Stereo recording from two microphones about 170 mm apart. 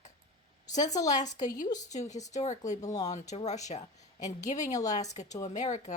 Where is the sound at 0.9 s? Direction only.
20° left (ahead or behind).